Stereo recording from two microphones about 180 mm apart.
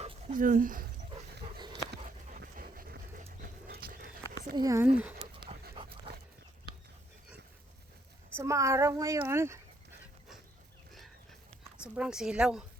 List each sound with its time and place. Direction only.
0.0 s a sound: 35° right (ahead or behind)
0.3 s speech: 45° right (ahead or behind)
1.5 s a sound: 25° right (ahead or behind)
2.4 s a sound: 55° right (ahead or behind)
3.4 s dog: 55° right (ahead or behind)
4.5 s speech: 20° right (ahead or behind)
4.9 s speech: 10° right (ahead or behind)
5.2 s dog: 25° right (ahead or behind)
8.4 s speech: 15° right (ahead or behind)
11.8 s a woman's voice: 5° right (ahead or behind)